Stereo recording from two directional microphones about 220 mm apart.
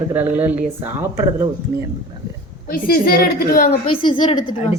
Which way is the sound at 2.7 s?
40° left (ahead or behind).